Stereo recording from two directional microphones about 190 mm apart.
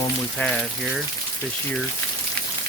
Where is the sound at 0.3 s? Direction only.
5° left (ahead or behind).